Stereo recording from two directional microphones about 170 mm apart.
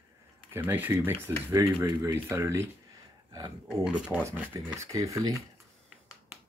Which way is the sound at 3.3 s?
20° right (ahead or behind).